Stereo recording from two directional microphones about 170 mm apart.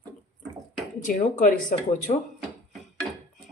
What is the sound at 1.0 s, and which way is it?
Speech, 50° left (ahead or behind).